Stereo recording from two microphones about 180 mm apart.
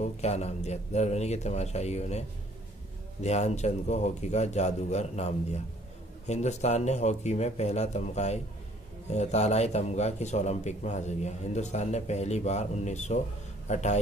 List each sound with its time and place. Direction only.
0.0 s a man's voice: 35° left (ahead or behind)